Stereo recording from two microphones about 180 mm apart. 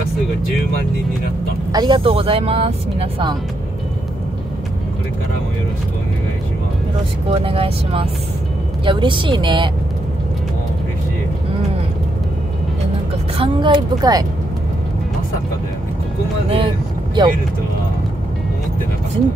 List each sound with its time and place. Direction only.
1.7 s speech: 25° right (ahead or behind)
7.3 s speech: 30° right (ahead or behind)
13.4 s speech: 25° right (ahead or behind)
16.4 s speech: 30° right (ahead or behind)